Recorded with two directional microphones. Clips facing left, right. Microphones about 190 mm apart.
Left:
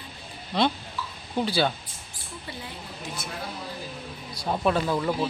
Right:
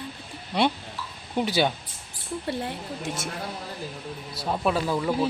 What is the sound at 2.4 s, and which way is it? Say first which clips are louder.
Speech: right 8 dB; 65° right (ahead or behind).